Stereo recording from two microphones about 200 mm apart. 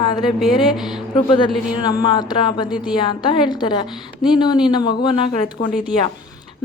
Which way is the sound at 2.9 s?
20° left (ahead or behind).